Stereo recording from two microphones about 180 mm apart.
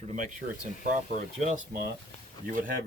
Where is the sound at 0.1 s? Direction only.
45° right (ahead or behind).